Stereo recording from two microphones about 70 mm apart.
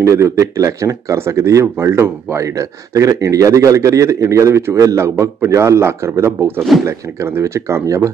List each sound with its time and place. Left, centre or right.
0.0 s speech: right